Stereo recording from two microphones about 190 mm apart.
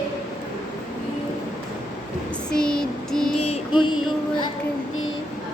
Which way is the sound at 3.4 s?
30° left (ahead or behind).